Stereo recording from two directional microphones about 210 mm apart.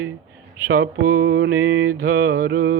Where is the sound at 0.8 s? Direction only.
80° right.